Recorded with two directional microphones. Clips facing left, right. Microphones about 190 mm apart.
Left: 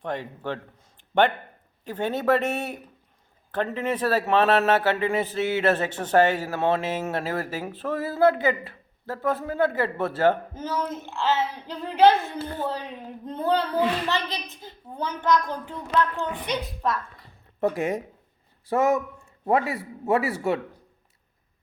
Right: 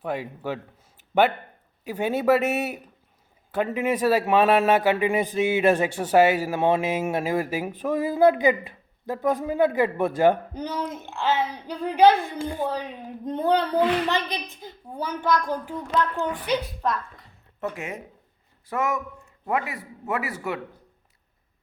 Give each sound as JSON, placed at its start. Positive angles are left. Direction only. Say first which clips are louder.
{"t": 0.0, "sound": "a man's voice", "louder": "right 1 dB", "side_deg": -10}
{"t": 1.8, "sound": "a man's voice", "louder": "right 2 dB", "side_deg": -10}
{"t": 17.6, "sound": "a man's voice", "louder": "left 7 dB", "side_deg": 35}